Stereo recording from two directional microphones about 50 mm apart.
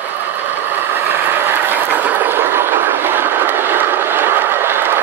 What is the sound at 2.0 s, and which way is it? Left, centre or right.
Train, right.